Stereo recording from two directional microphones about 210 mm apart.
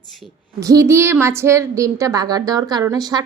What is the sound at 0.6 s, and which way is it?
A woman's voice, 15° right (ahead or behind).